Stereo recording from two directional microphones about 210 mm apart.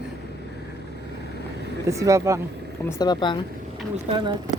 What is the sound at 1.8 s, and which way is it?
Speech, 15° right (ahead or behind).